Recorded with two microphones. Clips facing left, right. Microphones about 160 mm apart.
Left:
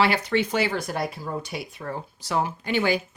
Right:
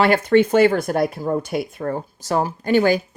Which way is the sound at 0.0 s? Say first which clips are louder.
Right 7 dB; 50° right (ahead or behind).